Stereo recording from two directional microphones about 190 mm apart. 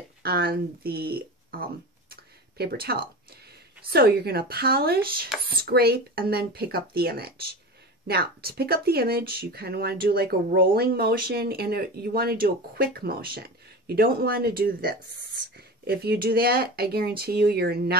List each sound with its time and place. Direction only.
0.2 s speech: 55° right (ahead or behind)